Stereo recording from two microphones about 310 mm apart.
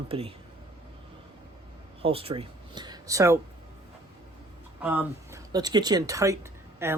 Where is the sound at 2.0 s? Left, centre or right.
Centre.